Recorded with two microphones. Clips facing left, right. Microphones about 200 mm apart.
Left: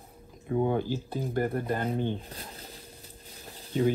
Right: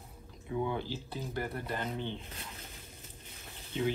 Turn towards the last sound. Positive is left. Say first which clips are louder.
# left 7 dB
turn(degrees=40)  # may be behind; listen again after turning